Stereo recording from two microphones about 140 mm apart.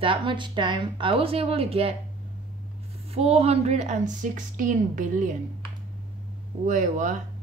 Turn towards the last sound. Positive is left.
turn(degrees=-60)  # may be behind; listen again after turning